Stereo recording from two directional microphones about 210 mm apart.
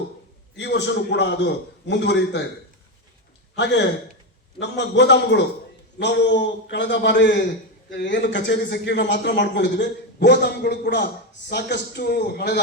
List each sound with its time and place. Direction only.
0.5 s a man's voice: 55° left (ahead or behind)
3.5 s a man's voice: 55° left (ahead or behind)